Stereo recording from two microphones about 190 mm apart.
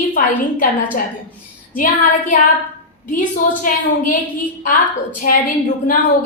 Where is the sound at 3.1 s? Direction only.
45° left (ahead or behind).